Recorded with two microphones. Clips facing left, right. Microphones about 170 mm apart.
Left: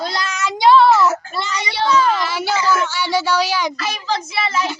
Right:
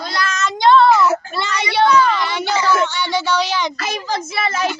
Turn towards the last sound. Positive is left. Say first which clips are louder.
# right 1 dB
turn(degrees=-45)  # may be behind; listen again after turning